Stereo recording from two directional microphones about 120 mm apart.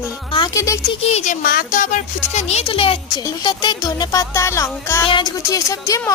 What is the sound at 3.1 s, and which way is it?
Speech, 35° left (ahead or behind).